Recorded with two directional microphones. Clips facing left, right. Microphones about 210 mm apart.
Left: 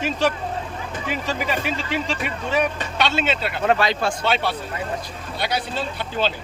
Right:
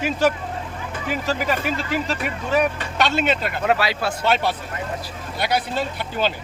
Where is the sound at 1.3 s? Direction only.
45° right (ahead or behind).